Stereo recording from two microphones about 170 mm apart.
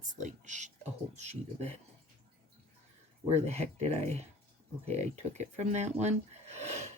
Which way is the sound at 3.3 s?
40° right (ahead or behind).